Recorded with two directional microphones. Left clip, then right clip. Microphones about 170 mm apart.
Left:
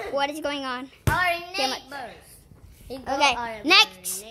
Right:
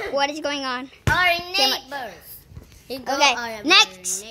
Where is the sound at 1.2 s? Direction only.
55° right (ahead or behind).